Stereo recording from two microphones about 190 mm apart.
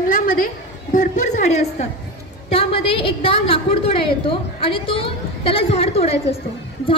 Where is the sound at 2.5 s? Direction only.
30° left (ahead or behind).